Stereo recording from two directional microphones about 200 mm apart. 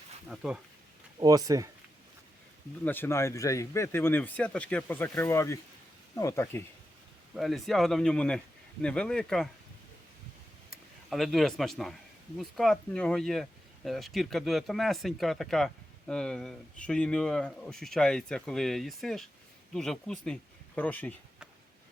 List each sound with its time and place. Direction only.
0.3 s speech: 5° right (ahead or behind)
1.2 s speech: 20° right (ahead or behind)
2.8 s speech: 10° left (ahead or behind)
7.3 s speech: centre (ahead or behind)
11.1 s speech: centre (ahead or behind)